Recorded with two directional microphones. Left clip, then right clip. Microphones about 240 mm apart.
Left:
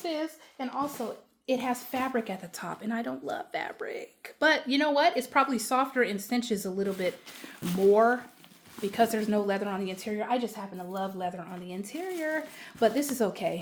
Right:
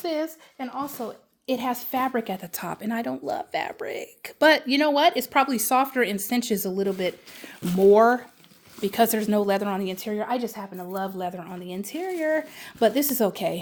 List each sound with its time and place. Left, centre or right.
0.0 s speech: right